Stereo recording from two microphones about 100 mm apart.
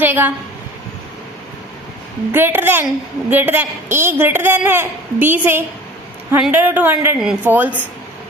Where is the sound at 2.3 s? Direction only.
20° right (ahead or behind).